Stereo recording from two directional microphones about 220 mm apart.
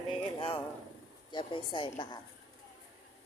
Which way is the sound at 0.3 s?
25° left (ahead or behind).